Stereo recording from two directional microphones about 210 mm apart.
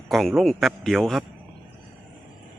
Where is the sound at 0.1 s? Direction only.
Centre (ahead or behind).